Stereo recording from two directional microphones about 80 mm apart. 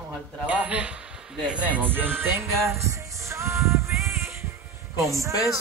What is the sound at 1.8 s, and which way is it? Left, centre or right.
Music, right.